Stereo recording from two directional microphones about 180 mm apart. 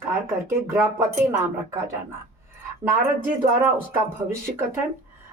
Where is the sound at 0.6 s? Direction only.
15° right (ahead or behind).